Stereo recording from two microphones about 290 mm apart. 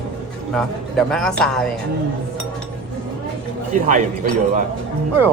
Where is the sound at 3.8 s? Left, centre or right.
Right.